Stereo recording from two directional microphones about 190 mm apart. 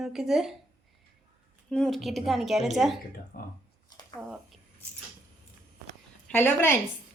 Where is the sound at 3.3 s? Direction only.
50° left (ahead or behind).